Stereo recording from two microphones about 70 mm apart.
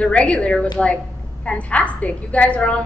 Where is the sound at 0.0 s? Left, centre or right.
Centre.